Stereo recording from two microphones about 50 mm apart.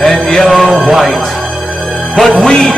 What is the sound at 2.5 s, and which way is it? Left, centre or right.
Speech, centre.